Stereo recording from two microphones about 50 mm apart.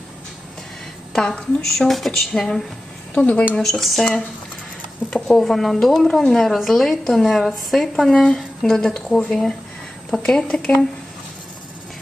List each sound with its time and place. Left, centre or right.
1.1 s a woman's voice: centre
3.2 s speech: left
3.5 s speech: centre
5.1 s a woman's voice: centre